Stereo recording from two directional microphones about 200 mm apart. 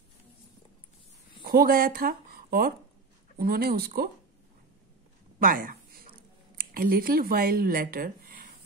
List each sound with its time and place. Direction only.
1.4 s speech: 50° right (ahead or behind)
5.4 s a sound: 45° right (ahead or behind)
6.5 s speech: 45° right (ahead or behind)